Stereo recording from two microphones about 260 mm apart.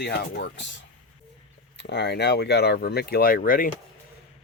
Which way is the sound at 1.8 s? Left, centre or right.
Left.